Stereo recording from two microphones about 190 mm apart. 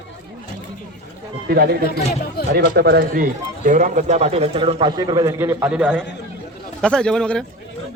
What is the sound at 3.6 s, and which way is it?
A man's voice, 45° right (ahead or behind).